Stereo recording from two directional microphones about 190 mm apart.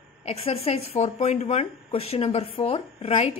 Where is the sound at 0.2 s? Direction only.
35° left (ahead or behind).